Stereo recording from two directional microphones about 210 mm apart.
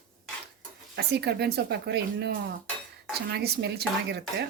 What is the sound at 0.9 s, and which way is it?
Speech, 50° right (ahead or behind).